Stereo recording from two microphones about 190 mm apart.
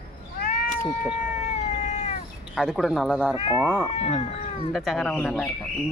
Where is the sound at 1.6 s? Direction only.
35° left (ahead or behind).